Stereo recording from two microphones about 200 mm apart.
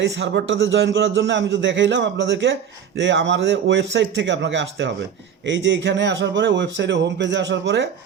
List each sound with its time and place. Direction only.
0.0 s a man's voice: 60° right (ahead or behind)